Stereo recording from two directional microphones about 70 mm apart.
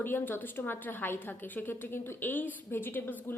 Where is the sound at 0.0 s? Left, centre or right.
Left.